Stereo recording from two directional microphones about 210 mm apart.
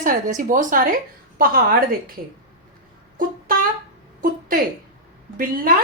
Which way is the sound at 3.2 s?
40° right (ahead or behind).